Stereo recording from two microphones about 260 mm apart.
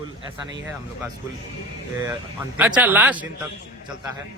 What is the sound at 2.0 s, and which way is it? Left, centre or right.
Speech, centre.